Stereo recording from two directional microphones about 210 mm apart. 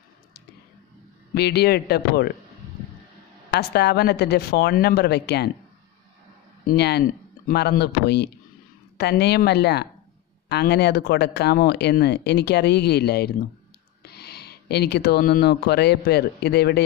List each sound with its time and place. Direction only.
1.3 s speech: 50° left (ahead or behind)
3.5 s speech: 50° left (ahead or behind)
6.6 s speech: 50° left (ahead or behind)